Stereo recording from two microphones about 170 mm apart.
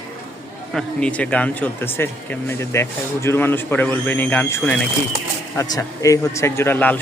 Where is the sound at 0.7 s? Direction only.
5° left (ahead or behind).